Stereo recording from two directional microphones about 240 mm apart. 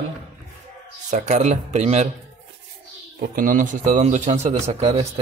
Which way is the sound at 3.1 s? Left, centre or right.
Right.